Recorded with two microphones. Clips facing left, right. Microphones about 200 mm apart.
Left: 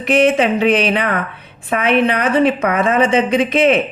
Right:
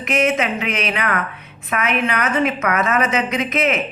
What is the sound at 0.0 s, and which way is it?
A woman's voice, 30° left (ahead or behind).